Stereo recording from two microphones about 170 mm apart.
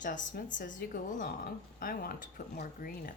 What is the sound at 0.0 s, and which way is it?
A woman's voice, 50° left (ahead or behind).